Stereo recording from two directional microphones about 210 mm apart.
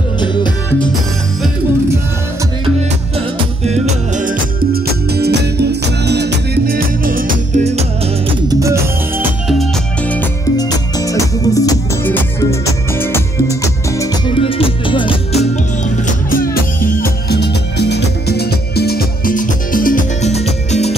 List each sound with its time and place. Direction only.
0.2 s music: 20° left (ahead or behind)
3.2 s music: 30° right (ahead or behind)
5.1 s music: 50° right (ahead or behind); by 7.8 s 35° right (ahead or behind)
8.3 s music: 15° right (ahead or behind)
9.5 s music: 5° left (ahead or behind)
10.6 s music: 15° left (ahead or behind)
14.4 s music: 25° left (ahead or behind)
16.1 s music: 40° left (ahead or behind)
17.0 s music: 50° left (ahead or behind); by 20.9 s 30° left (ahead or behind)